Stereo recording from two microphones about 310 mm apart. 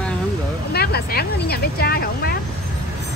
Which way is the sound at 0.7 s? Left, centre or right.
Left.